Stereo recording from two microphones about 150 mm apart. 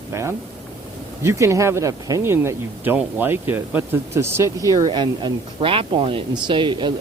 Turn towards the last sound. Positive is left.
turn(degrees=-30)  # may be behind; listen again after turning